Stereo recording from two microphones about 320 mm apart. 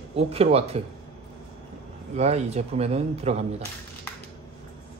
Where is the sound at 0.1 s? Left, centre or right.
Centre.